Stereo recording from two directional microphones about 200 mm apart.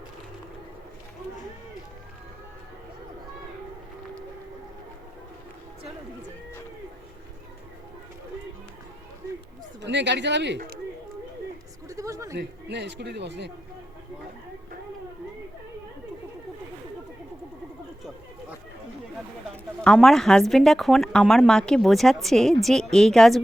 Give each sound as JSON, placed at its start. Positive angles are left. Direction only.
{"t": 9.8, "sound": "a man's voice", "side_deg": -60}
{"t": 11.9, "sound": "a sound", "side_deg": -15}
{"t": 12.4, "sound": "a man's voice", "side_deg": -55}
{"t": 19.8, "sound": "a woman's voice", "side_deg": 5}